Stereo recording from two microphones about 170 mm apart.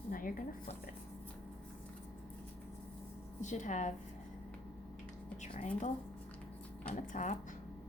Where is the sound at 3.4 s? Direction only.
45° left (ahead or behind).